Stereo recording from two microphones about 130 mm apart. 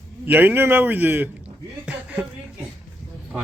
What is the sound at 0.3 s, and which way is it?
A man's voice, 15° right (ahead or behind).